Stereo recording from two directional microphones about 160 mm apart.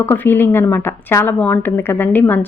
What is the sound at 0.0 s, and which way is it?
Speech, 15° left (ahead or behind).